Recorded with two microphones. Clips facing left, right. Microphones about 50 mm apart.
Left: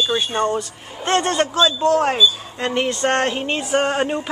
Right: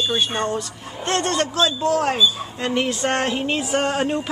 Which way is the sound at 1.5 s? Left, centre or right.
Centre.